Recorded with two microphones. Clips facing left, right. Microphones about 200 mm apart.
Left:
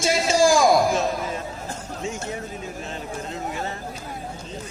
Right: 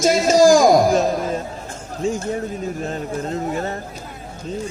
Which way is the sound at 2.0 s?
35° right (ahead or behind).